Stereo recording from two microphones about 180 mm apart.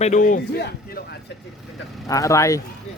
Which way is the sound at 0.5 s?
65° left (ahead or behind).